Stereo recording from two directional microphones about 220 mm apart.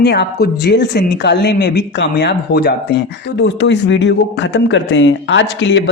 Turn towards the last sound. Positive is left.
turn(degrees=55)  # may be behind; listen again after turning